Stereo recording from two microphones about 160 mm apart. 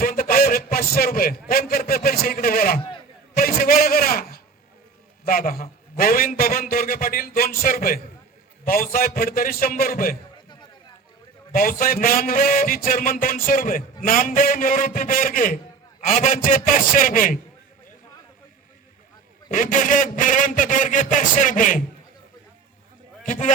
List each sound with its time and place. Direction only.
0.0 s a sound: 65° left (ahead or behind)
5.2 s a man's voice: 65° left (ahead or behind)
11.5 s a man's voice: 65° left (ahead or behind)
19.5 s a man's voice: 55° left (ahead or behind)
23.2 s speech: 55° left (ahead or behind)